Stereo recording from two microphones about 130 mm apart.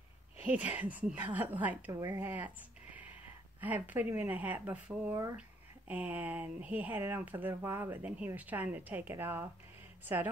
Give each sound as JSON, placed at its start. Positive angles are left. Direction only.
{"t": 0.4, "sound": "speech", "side_deg": -15}
{"t": 1.9, "sound": "speech", "side_deg": -25}
{"t": 2.1, "sound": "speech", "side_deg": -15}
{"t": 3.6, "sound": "speech", "side_deg": -15}